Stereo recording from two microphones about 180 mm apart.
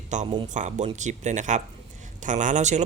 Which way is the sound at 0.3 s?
25° right (ahead or behind).